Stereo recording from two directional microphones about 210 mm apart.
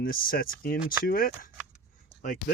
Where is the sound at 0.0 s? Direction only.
45° left (ahead or behind).